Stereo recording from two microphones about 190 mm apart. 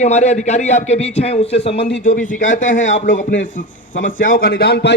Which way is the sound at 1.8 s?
65° left (ahead or behind).